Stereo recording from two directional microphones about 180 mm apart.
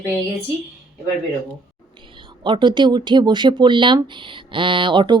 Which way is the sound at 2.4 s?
25° right (ahead or behind).